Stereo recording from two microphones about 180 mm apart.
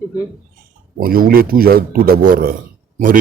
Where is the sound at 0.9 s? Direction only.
55° right (ahead or behind).